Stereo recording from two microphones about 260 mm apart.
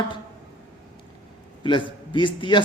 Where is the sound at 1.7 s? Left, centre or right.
Centre.